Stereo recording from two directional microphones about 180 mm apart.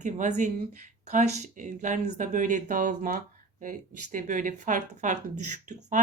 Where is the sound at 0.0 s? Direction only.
45° right (ahead or behind).